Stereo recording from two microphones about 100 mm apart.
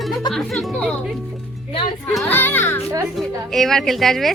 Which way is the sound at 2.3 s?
20° left (ahead or behind).